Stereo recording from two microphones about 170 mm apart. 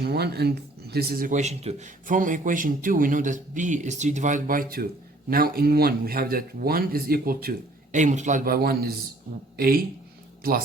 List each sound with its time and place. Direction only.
0.0 s speech: 70° right (ahead or behind)
7.9 s speech: 45° right (ahead or behind)